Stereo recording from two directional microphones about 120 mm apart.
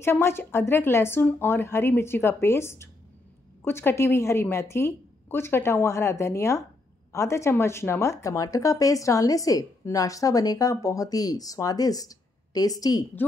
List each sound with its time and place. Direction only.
0.0 s speech: 20° left (ahead or behind)